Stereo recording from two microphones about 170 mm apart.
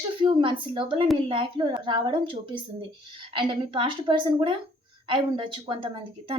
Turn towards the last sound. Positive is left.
turn(degrees=-30)  # may be behind; listen again after turning